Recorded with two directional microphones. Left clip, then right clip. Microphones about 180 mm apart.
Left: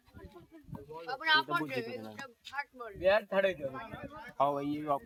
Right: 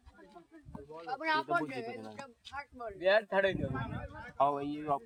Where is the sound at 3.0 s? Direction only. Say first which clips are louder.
Even; 50° left (ahead or behind).